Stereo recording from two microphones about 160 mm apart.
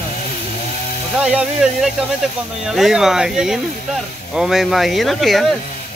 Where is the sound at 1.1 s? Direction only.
5° right (ahead or behind).